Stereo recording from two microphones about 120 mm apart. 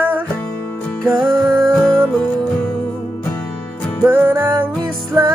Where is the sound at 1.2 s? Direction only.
35° right (ahead or behind).